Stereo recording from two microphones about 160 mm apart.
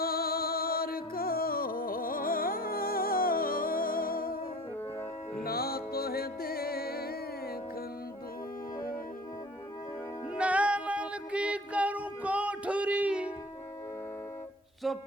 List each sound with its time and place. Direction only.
0.0 s music: 70° left (ahead or behind)
5.4 s music: 70° left (ahead or behind)
10.3 s child singing: 10° right (ahead or behind)
14.8 s a sound: centre (ahead or behind)